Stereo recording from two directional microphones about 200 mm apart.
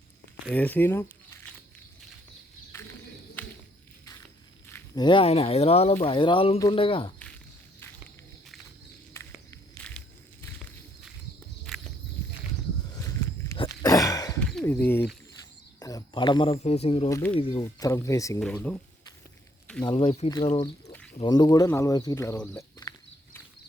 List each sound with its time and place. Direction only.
0.5 s speech: 10° left (ahead or behind)
4.7 s speech: 20° left (ahead or behind)
9.5 s walk: 5° left (ahead or behind)
13.0 s a sound: 15° left (ahead or behind)
13.6 s throat clearing: 20° left (ahead or behind)
14.3 s a sound: 5° left (ahead or behind)
15.8 s speech: 15° left (ahead or behind)
17.1 s speech: 10° left (ahead or behind)
17.4 s speech: 25° left (ahead or behind)
18.3 s speech: 5° left (ahead or behind)
19.8 s speech: 25° left (ahead or behind)
20.9 s bird: 5° left (ahead or behind)
21.2 s speech: 20° left (ahead or behind)